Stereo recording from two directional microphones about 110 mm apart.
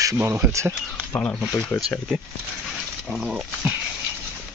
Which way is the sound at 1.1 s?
10° left (ahead or behind).